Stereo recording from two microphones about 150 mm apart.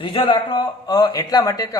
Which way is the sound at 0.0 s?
35° left (ahead or behind).